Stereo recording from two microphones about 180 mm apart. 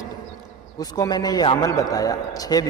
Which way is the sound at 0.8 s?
20° left (ahead or behind).